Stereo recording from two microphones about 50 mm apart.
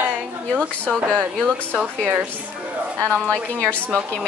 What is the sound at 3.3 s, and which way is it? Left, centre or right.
Speech, left.